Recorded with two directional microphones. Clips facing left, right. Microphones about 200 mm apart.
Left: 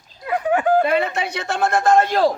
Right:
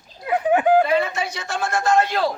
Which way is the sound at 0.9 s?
60° left (ahead or behind).